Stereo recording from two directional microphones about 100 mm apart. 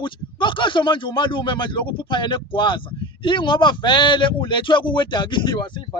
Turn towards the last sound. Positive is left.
turn(degrees=50)  # may be behind; listen again after turning